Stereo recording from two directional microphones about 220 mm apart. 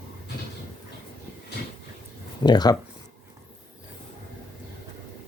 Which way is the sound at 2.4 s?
20° left (ahead or behind).